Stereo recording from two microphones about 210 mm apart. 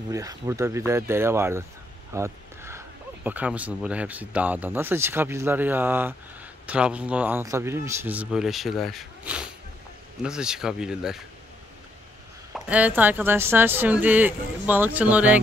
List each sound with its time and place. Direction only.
0.1 s speech: 15° right (ahead or behind)
2.1 s a sound: 10° right (ahead or behind)
3.3 s speech: 5° right (ahead or behind)
12.5 s speech: 5° right (ahead or behind)